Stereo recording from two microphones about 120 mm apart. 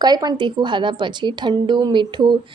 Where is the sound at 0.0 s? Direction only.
35° right (ahead or behind).